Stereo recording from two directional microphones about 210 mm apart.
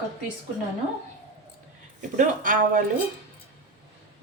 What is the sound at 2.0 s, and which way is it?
Speech, 35° right (ahead or behind).